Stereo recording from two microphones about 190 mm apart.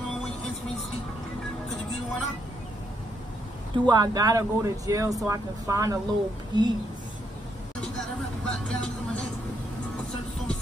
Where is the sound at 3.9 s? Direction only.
20° right (ahead or behind).